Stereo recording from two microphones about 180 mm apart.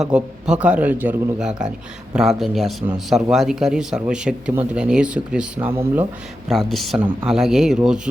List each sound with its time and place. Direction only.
0.0 s speech: 5° right (ahead or behind)
6.5 s speech: centre (ahead or behind)